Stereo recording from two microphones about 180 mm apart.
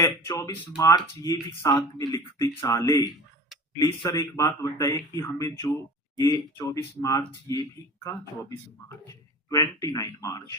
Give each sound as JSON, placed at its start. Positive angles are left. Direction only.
{"t": 0.0, "sound": "speech", "side_deg": 20}